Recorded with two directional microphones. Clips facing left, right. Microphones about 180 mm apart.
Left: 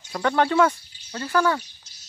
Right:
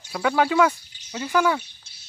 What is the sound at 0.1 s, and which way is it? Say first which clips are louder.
Speech: even; 5° right (ahead or behind).